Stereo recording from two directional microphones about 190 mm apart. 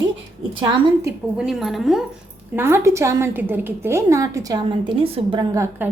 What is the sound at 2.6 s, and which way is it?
A woman's voice, 10° right (ahead or behind).